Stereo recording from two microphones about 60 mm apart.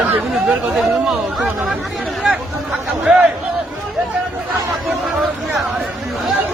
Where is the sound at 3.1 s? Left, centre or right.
Centre.